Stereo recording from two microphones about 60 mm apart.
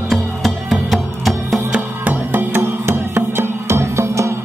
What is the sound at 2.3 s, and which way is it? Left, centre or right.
Music, right.